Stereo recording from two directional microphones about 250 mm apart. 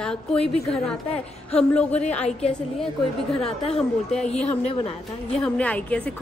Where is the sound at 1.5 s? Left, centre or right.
Centre.